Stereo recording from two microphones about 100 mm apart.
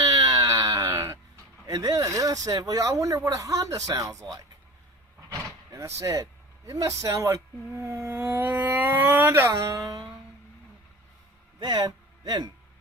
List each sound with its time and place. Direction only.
0.0 s wail: 35° right (ahead or behind)
1.6 s speech: 40° right (ahead or behind)
5.5 s a sound: 30° right (ahead or behind)
6.7 s speech: 35° right (ahead or behind)
11.6 s speech: 40° right (ahead or behind)